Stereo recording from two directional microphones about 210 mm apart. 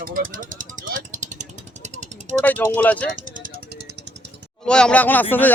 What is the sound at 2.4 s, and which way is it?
Speech, 10° left (ahead or behind).